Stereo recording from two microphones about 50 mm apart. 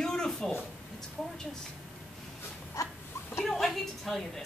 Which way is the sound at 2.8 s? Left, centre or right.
Left.